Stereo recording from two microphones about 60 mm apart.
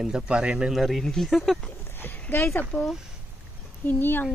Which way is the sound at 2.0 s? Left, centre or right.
Left.